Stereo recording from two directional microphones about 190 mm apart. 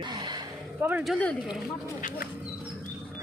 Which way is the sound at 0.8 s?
10° right (ahead or behind).